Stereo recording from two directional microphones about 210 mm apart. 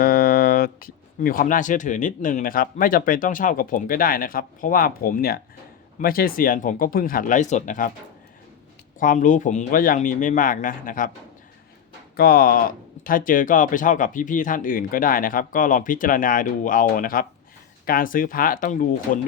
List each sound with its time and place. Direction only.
0.0 s speech: 45° left (ahead or behind)
9.0 s speech: 40° left (ahead or behind)
12.1 s speech: 45° left (ahead or behind)